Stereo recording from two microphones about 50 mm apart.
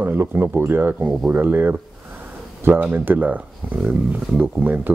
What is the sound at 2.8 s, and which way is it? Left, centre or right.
Speech, right.